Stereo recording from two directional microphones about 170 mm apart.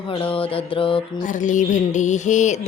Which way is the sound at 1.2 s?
45° left (ahead or behind).